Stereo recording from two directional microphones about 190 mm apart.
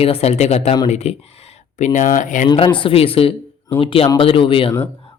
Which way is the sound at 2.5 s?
25° left (ahead or behind).